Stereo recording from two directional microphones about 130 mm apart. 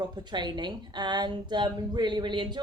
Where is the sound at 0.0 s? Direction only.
35° right (ahead or behind).